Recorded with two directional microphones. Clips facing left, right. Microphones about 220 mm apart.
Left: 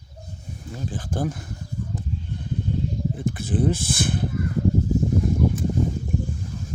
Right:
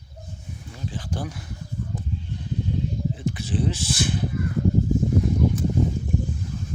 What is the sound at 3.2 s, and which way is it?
Speech, 55° left (ahead or behind).